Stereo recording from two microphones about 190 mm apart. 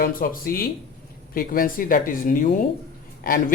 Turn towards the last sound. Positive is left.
turn(degrees=50)  # may be behind; listen again after turning